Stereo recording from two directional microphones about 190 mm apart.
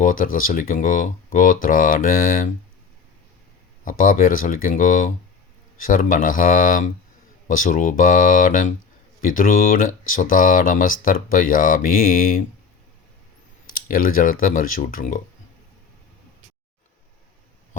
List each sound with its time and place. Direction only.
0.0 s speech: 45° left (ahead or behind)
3.8 s speech: 45° left (ahead or behind)
13.7 s speech: 50° left (ahead or behind)